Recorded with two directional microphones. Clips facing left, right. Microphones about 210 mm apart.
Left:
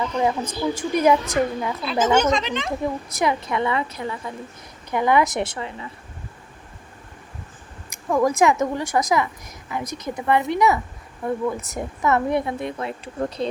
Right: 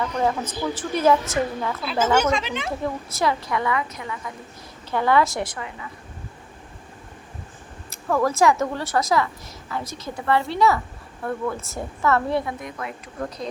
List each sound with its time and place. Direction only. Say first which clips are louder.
0.0 s a woman's voice: left 1 dB; 15° left (ahead or behind)
1.8 s a woman's voice: left 2 dB; 5° right (ahead or behind)
2.8 s a woman's voice: even; 20° left (ahead or behind)
4.9 s a woman's voice: left 1 dB; 15° left (ahead or behind)
7.9 s a woman's voice: left 2 dB; 15° left (ahead or behind)